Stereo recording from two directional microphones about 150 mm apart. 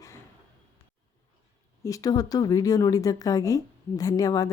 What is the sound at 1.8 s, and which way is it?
Speech, 25° left (ahead or behind).